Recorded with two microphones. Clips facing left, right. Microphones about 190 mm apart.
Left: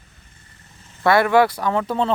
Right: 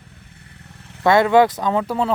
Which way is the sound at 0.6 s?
65° right (ahead or behind).